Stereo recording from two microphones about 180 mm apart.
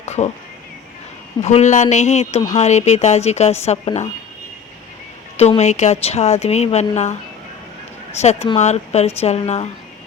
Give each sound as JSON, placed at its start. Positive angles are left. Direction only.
{"t": 0.0, "sound": "music", "side_deg": 40}
{"t": 1.4, "sound": "a woman's voice", "side_deg": 40}
{"t": 5.4, "sound": "a woman's voice", "side_deg": 40}
{"t": 8.2, "sound": "a woman's voice", "side_deg": 35}